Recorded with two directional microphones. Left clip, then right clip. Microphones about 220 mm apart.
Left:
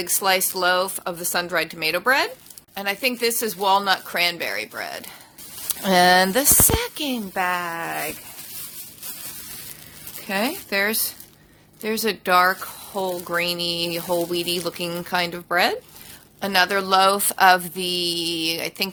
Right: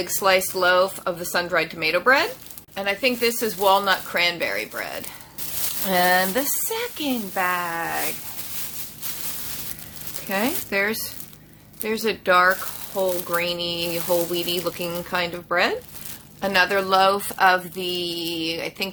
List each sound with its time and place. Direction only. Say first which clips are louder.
0.0 s speech: right 1 dB; 50° left (ahead or behind)
10.2 s speech: even; 50° left (ahead or behind)